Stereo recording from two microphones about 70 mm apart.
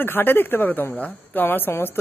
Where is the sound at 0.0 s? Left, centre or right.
Left.